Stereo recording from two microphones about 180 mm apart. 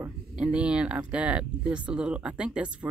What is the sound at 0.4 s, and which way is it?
Speech, 5° right (ahead or behind).